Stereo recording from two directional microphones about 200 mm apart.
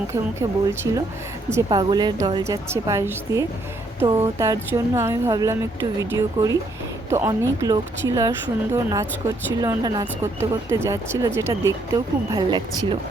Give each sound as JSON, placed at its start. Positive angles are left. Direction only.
{"t": 0.1, "sound": "speech", "side_deg": -15}